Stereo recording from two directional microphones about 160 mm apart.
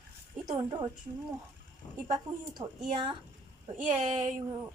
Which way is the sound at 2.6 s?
25° right (ahead or behind).